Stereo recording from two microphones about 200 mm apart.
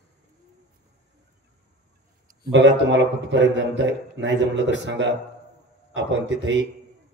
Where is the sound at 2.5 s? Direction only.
60° right (ahead or behind).